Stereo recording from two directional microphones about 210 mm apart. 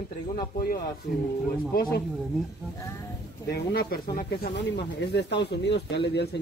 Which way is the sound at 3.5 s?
50° left (ahead or behind).